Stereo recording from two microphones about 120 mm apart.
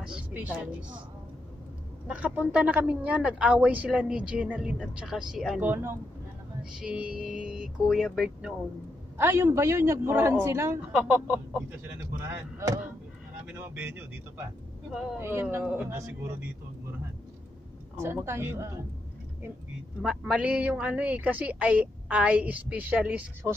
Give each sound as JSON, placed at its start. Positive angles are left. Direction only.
{"t": 0.0, "sound": "speech", "side_deg": -10}
{"t": 2.0, "sound": "speech", "side_deg": -10}
{"t": 5.6, "sound": "a man's voice", "side_deg": -20}
{"t": 6.8, "sound": "speech", "side_deg": -10}
{"t": 9.1, "sound": "a man's voice", "side_deg": -20}
{"t": 10.9, "sound": "a man's voice", "side_deg": -10}
{"t": 14.9, "sound": "speech", "side_deg": -5}
{"t": 15.1, "sound": "a man's voice", "side_deg": -20}
{"t": 17.9, "sound": "a man's voice", "side_deg": -20}
{"t": 20.0, "sound": "speech", "side_deg": -5}
{"t": 23.4, "sound": "a man's voice", "side_deg": -25}